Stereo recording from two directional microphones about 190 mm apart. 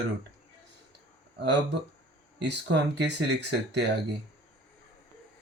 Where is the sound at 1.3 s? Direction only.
60° right (ahead or behind).